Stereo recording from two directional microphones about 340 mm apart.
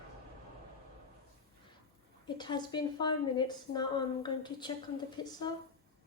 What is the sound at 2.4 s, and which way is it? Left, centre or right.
A woman's voice, centre.